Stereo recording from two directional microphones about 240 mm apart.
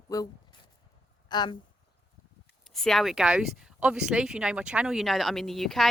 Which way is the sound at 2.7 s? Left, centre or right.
Centre.